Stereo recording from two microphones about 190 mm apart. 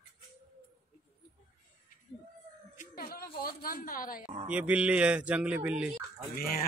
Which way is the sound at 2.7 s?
55° left (ahead or behind).